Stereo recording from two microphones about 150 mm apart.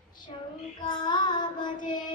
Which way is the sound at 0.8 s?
30° left (ahead or behind).